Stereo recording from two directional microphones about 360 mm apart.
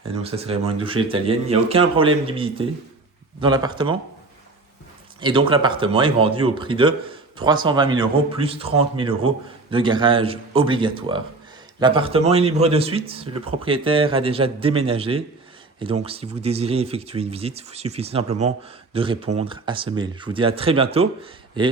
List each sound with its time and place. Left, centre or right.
0.2 s speech: centre
5.2 s speech: centre